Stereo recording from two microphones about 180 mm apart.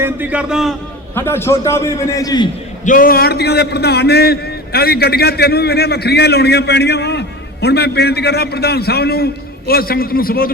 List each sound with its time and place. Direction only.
0.0 s a man's voice: 10° right (ahead or behind)
1.1 s a man's voice: 15° left (ahead or behind)
2.8 s a man's voice: 50° left (ahead or behind)